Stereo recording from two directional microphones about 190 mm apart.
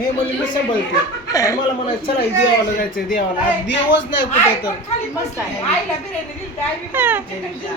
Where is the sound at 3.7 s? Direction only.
70° left (ahead or behind).